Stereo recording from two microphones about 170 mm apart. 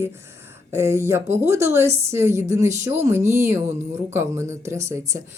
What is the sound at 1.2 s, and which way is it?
Speech, 40° right (ahead or behind).